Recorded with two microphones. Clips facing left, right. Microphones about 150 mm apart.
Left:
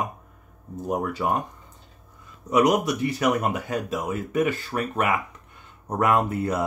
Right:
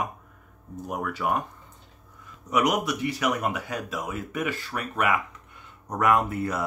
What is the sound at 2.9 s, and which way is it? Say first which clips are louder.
Speech: left 4 dB; 45° left (ahead or behind).